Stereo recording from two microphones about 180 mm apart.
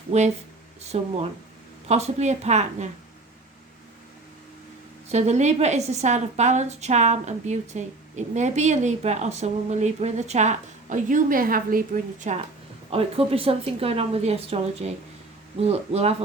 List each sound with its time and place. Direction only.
0.1 s a woman's voice: 35° right (ahead or behind)
5.0 s a woman's voice: 40° right (ahead or behind)
12.9 s a woman's voice: 30° right (ahead or behind)